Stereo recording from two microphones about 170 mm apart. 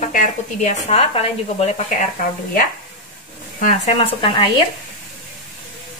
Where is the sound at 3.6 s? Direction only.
45° left (ahead or behind).